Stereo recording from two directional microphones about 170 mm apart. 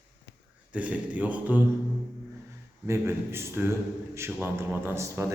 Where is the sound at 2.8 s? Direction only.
15° right (ahead or behind).